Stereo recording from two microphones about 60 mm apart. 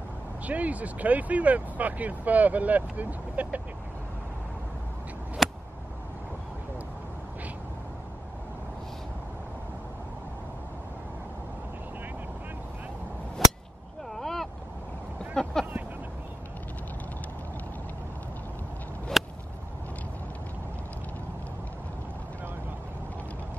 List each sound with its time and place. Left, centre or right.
0.5 s speech: right
5.4 s a sound: centre
14.1 s boat: centre
15.4 s vehicle: centre
19.2 s whip: centre